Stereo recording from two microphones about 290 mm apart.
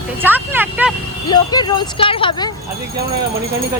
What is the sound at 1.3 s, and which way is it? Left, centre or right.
Speech, centre.